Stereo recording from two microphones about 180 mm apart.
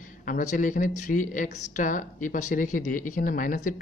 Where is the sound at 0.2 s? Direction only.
45° left (ahead or behind).